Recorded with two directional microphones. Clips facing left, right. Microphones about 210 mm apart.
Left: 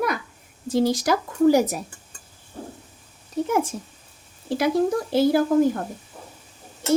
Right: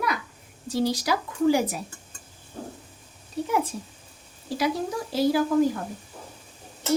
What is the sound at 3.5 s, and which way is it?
A woman's voice, 45° left (ahead or behind).